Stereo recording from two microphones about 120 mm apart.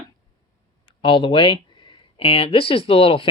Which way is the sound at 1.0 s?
45° left (ahead or behind).